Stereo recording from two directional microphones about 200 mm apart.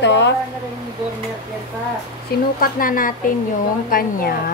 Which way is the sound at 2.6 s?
45° left (ahead or behind).